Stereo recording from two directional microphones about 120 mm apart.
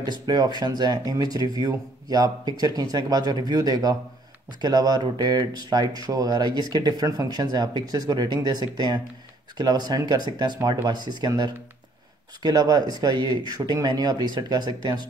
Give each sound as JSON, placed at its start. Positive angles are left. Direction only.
{"t": 0.0, "sound": "speech", "side_deg": -35}